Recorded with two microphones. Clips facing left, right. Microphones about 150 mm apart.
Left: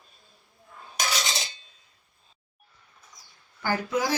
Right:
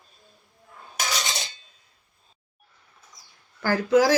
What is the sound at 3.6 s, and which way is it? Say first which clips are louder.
Speech: right 7 dB; 90° right.